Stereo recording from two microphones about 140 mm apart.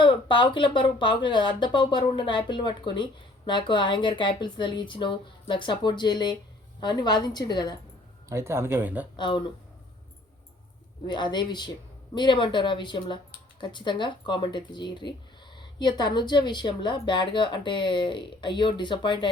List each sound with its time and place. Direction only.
0.0 s speech: 35° left (ahead or behind)
8.3 s speech: 20° right (ahead or behind)
9.1 s speech: 35° left (ahead or behind)
11.0 s speech: 30° left (ahead or behind)